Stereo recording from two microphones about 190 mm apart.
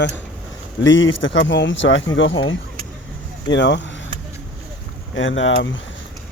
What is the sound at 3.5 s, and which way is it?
Speech, 70° left (ahead or behind).